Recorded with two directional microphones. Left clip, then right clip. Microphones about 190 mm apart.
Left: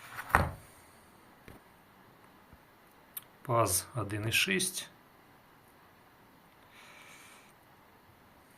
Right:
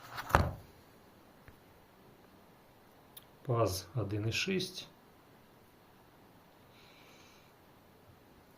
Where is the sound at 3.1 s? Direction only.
Centre (ahead or behind).